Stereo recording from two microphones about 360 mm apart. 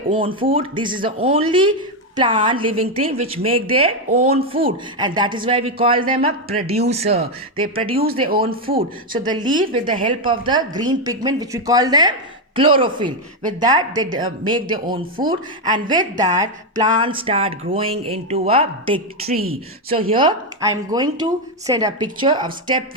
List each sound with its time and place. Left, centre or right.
0.1 s speech: centre
9.1 s speech: centre